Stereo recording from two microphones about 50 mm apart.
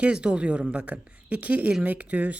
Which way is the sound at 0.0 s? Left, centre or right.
Right.